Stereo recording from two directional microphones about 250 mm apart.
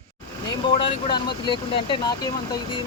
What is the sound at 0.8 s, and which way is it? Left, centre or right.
Speech, centre.